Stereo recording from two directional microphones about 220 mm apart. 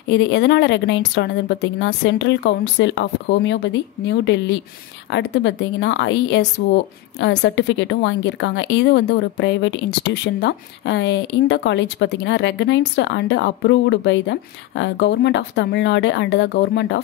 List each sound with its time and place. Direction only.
0.1 s a woman's voice: 55° left (ahead or behind)